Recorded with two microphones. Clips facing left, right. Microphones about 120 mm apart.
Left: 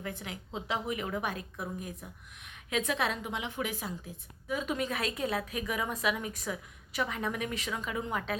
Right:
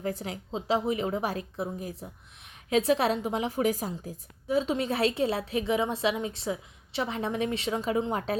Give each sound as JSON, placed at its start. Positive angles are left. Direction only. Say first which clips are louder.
{"t": 0.0, "sound": "a woman's voice", "louder": "right 7 dB", "side_deg": -35}